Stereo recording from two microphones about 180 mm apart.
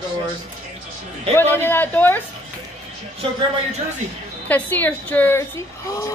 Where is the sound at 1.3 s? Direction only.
10° left (ahead or behind).